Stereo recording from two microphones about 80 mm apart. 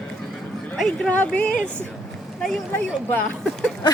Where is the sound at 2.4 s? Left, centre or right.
Centre.